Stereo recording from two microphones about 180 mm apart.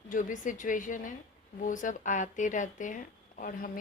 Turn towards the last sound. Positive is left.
turn(degrees=50)  # may be behind; listen again after turning